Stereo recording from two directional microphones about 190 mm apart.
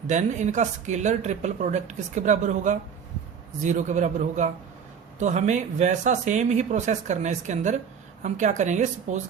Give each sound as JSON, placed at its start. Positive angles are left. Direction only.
{"t": 0.1, "sound": "a woman's voice", "side_deg": -40}